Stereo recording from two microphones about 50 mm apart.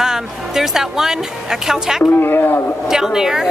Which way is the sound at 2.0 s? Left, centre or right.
Left.